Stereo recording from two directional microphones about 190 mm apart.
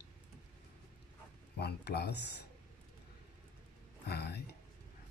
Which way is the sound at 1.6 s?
60° left (ahead or behind).